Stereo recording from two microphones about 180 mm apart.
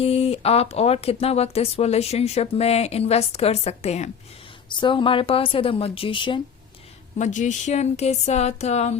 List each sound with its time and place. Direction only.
0.0 s speech: 35° left (ahead or behind)
4.7 s speech: 25° left (ahead or behind)
7.2 s speech: 45° left (ahead or behind)